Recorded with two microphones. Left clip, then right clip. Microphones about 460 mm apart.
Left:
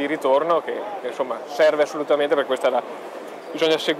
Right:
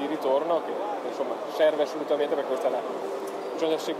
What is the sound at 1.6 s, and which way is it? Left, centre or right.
Speech, left.